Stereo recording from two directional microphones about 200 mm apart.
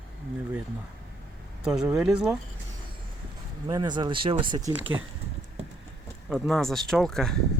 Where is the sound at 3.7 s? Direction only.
20° right (ahead or behind).